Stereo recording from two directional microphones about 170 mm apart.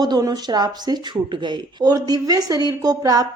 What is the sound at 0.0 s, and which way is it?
Speech, 25° right (ahead or behind).